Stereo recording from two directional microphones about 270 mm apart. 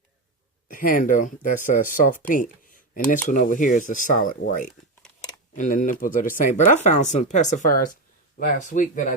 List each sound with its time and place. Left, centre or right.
0.7 s speech: left